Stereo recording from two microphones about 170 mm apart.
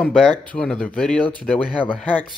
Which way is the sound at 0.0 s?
5° left (ahead or behind).